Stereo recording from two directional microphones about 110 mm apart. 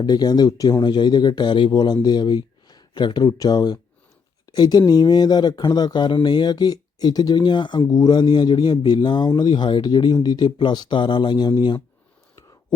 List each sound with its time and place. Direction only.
0.0 s speech: 40° left (ahead or behind)